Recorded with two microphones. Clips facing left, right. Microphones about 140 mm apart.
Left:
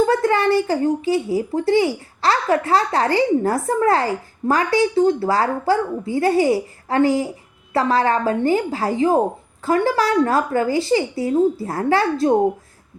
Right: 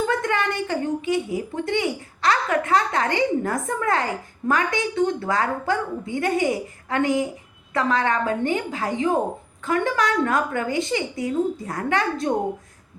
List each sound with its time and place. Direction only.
0.0 s speech: 35° left (ahead or behind)